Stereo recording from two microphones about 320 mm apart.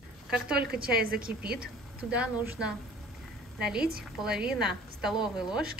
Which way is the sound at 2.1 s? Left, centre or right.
Centre.